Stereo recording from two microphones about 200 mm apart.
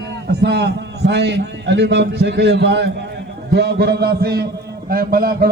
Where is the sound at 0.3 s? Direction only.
55° right (ahead or behind).